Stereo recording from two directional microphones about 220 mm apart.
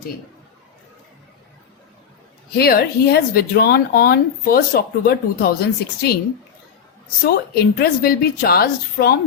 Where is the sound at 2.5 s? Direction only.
45° left (ahead or behind).